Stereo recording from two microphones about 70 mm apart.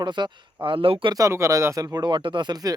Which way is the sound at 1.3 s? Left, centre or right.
Right.